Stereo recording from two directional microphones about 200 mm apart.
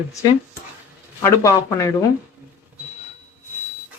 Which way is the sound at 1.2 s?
15° left (ahead or behind).